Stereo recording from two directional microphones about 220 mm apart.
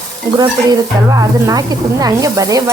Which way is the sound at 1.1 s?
15° right (ahead or behind).